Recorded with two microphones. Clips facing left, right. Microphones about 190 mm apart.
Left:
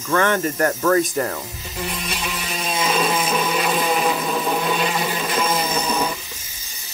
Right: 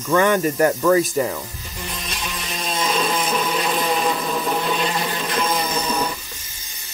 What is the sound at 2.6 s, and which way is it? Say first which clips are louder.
Chainsaw: left 1 dB; 5° left (ahead or behind).